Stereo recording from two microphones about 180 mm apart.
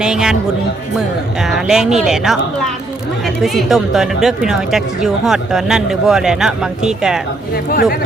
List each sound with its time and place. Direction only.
0.0 s speech: 5° right (ahead or behind)
7.5 s speech: 55° left (ahead or behind)